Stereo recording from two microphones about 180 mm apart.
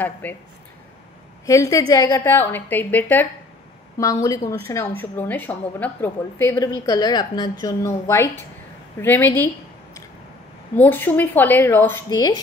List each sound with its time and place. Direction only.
0.0 s a woman's voice: 10° left (ahead or behind)
1.4 s a woman's voice: 15° left (ahead or behind)
10.8 s a woman's voice: 10° left (ahead or behind)